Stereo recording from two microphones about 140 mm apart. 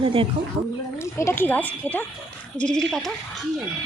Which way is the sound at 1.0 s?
20° left (ahead or behind).